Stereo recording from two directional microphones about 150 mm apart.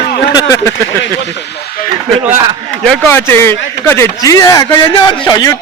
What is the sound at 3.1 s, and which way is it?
Speech, 15° left (ahead or behind).